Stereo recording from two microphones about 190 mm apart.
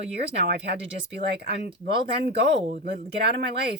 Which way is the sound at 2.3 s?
55° right (ahead or behind).